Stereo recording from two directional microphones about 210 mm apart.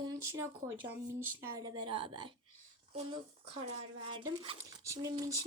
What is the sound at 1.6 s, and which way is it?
Speech, 20° right (ahead or behind).